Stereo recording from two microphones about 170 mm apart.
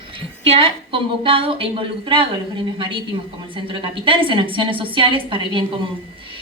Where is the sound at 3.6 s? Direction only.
30° right (ahead or behind).